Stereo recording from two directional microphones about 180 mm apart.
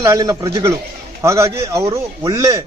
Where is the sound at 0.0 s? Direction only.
20° right (ahead or behind).